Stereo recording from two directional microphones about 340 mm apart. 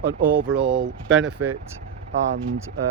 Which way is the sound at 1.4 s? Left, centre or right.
Right.